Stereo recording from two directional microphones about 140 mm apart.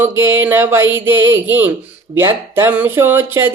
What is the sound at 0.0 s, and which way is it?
Speech, 15° right (ahead or behind).